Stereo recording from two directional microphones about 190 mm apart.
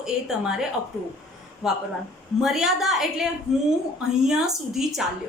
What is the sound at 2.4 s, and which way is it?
A woman's voice, centre (ahead or behind).